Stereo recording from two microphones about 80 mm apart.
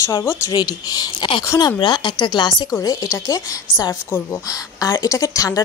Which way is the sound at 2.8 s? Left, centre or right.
Left.